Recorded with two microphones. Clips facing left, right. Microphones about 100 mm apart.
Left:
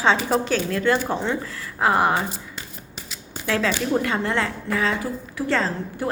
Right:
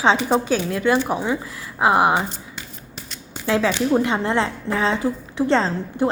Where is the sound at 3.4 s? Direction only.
20° right (ahead or behind).